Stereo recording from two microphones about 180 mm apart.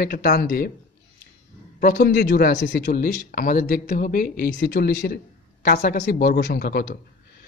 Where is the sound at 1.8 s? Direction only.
50° left (ahead or behind).